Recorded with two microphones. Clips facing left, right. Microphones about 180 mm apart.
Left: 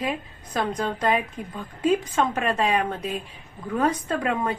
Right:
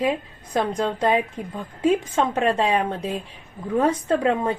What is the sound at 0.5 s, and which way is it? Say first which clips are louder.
A woman's voice: right 3 dB; 25° right (ahead or behind).